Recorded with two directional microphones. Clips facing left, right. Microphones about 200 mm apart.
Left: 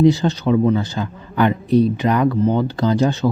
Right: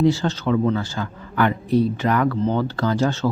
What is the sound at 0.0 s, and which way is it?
A man's voice, 15° left (ahead or behind).